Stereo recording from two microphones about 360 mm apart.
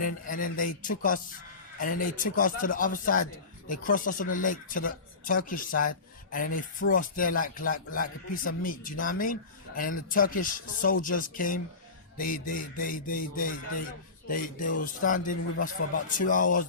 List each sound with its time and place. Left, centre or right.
0.0 s speech: left